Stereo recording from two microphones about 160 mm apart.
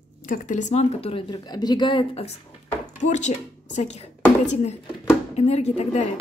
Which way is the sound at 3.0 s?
45° left (ahead or behind).